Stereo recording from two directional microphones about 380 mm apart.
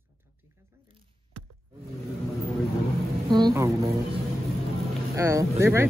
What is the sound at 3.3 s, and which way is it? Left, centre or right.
A woman's voice, centre.